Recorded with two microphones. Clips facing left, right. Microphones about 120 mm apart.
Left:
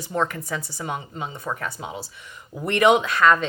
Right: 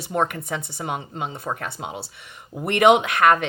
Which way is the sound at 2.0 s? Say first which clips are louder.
Even; 75° right (ahead or behind).